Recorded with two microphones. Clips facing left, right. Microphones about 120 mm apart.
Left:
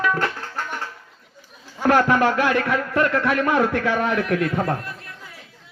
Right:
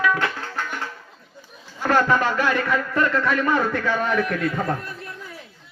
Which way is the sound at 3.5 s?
60° left (ahead or behind).